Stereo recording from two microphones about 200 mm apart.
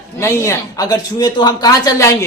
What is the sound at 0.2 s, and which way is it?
Speech, 15° left (ahead or behind).